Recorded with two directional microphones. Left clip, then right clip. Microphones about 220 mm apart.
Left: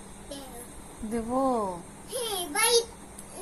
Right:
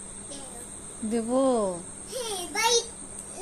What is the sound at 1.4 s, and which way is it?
Speech, 30° right (ahead or behind).